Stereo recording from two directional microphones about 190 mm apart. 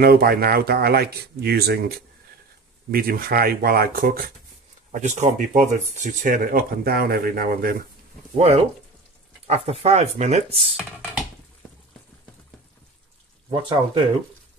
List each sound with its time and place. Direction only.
0.0 s speech: 55° right (ahead or behind)
4.9 s speech: 40° right (ahead or behind)
8.4 s speech: 30° right (ahead or behind)
13.6 s speech: 30° right (ahead or behind)